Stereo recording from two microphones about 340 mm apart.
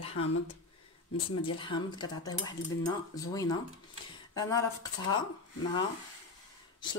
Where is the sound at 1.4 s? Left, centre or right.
Centre.